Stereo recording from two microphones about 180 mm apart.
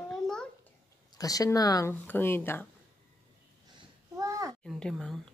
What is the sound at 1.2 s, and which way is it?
Speech, 20° left (ahead or behind).